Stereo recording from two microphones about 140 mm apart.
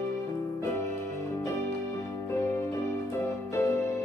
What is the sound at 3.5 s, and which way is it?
Music, 20° left (ahead or behind).